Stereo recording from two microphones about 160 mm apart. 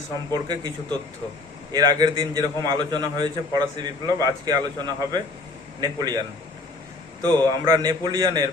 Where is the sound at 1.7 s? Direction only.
25° right (ahead or behind).